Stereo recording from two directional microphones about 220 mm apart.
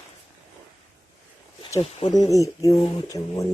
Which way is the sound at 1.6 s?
25° left (ahead or behind).